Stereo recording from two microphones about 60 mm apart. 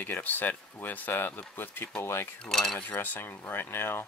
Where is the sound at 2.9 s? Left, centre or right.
Left.